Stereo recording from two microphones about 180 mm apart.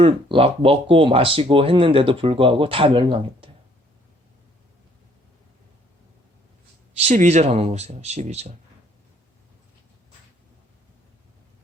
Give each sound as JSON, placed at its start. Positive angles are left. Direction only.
{"t": 0.0, "sound": "speech", "side_deg": -30}
{"t": 7.0, "sound": "speech", "side_deg": -35}